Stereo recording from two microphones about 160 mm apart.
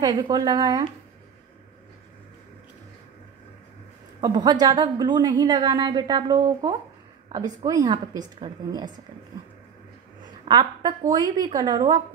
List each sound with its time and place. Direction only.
0.0 s a woman's voice: 25° right (ahead or behind)
4.2 s a woman's voice: 30° right (ahead or behind)
10.5 s a woman's voice: 30° right (ahead or behind)